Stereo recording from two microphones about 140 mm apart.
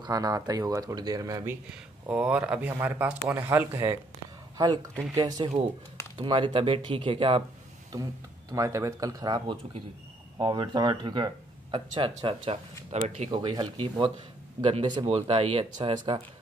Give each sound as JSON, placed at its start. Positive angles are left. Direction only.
{"t": 0.0, "sound": "speech", "side_deg": -25}
{"t": 1.7, "sound": "speech", "side_deg": -10}
{"t": 7.9, "sound": "speech", "side_deg": -25}
{"t": 12.9, "sound": "speech", "side_deg": -55}
{"t": 13.3, "sound": "speech", "side_deg": -30}